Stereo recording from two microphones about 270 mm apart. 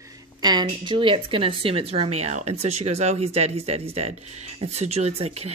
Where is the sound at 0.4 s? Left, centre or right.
Centre.